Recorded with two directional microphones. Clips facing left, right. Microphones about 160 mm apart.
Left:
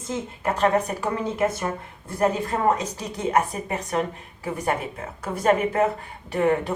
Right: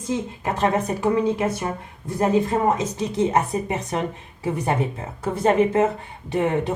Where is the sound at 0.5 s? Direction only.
20° right (ahead or behind).